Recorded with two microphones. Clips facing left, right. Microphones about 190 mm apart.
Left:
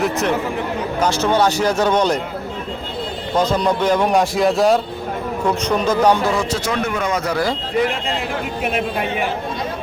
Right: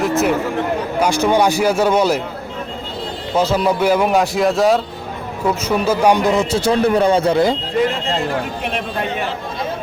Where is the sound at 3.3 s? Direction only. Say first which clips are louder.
Right 1 dB; 5° right (ahead or behind); by 7.5 s 25° right (ahead or behind).